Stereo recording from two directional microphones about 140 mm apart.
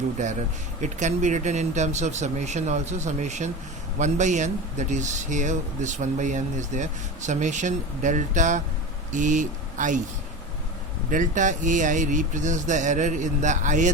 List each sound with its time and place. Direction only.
0.2 s speech: 60° right (ahead or behind)
11.1 s speech: 65° right (ahead or behind)